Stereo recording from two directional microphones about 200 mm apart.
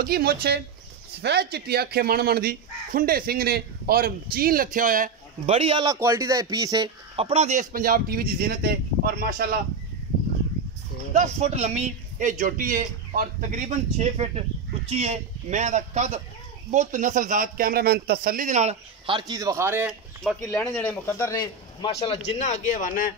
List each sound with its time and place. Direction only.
0.0 s speech: 50° right (ahead or behind); by 5.9 s 25° right (ahead or behind)
5.9 s speech: 15° right (ahead or behind); by 9.6 s 50° right (ahead or behind)
11.1 s speech: 35° right (ahead or behind); by 20.0 s 10° right (ahead or behind)
20.4 s a man's voice: 10° left (ahead or behind)
22.4 s speech: 40° left (ahead or behind)